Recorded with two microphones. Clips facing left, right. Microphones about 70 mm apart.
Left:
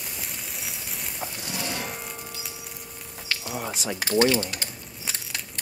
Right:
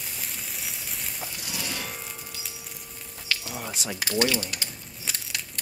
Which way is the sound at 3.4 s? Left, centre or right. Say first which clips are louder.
Left 4 dB; centre.